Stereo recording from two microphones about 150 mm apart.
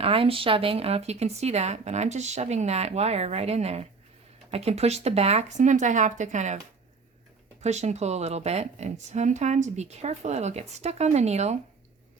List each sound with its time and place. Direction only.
0.0 s a woman's voice: 40° right (ahead or behind)
7.6 s a woman's voice: 50° right (ahead or behind)